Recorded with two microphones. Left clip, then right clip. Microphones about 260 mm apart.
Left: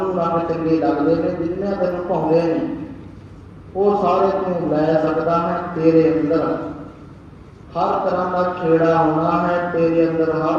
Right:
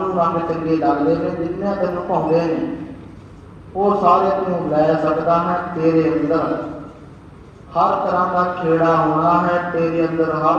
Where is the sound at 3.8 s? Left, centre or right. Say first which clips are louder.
Right 2 dB; right.